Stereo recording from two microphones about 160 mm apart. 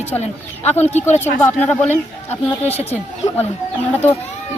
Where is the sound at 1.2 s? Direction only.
10° left (ahead or behind).